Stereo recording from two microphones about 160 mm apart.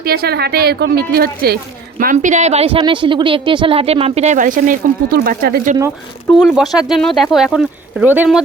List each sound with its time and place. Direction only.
0.0 s a woman's voice: 70° right (ahead or behind)
2.1 s a woman's voice: 45° right (ahead or behind); by 5.7 s 70° right (ahead or behind)
6.4 s speech: centre (ahead or behind)